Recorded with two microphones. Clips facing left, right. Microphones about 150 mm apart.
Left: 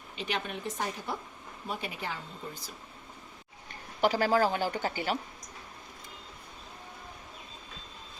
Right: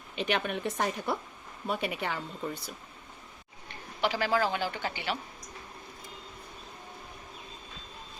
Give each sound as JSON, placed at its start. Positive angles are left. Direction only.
{"t": 0.2, "sound": "a woman's voice", "side_deg": -65}
{"t": 4.0, "sound": "speech", "side_deg": 40}